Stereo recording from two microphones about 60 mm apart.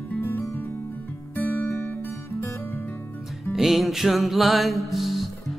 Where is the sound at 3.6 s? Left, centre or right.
Centre.